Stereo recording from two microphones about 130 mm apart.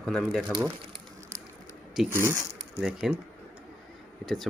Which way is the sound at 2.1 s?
20° right (ahead or behind).